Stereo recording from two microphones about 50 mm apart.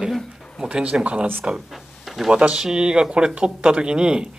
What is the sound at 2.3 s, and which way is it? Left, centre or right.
Speech, right.